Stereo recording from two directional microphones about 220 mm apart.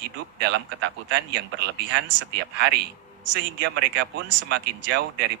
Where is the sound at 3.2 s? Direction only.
90° right.